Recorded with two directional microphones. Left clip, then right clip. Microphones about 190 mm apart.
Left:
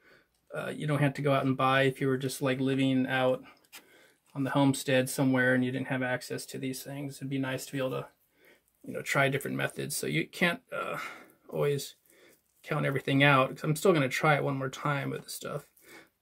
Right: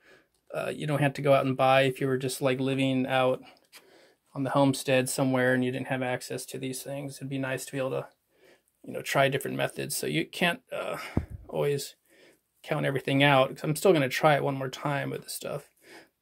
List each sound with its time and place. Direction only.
0.5 s speech: 35° right (ahead or behind)
8.9 s speech: 30° right (ahead or behind)